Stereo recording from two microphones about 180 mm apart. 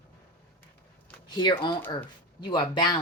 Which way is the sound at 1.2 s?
25° left (ahead or behind).